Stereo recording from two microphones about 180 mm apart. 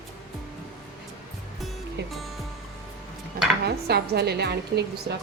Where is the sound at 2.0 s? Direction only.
65° right (ahead or behind).